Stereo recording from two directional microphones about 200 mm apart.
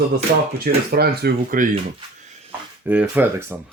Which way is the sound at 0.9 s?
50° right (ahead or behind).